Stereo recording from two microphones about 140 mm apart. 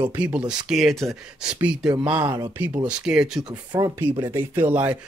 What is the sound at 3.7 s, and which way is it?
Speech, 30° right (ahead or behind).